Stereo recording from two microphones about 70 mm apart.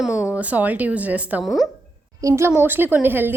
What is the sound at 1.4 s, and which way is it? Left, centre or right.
Speech, centre.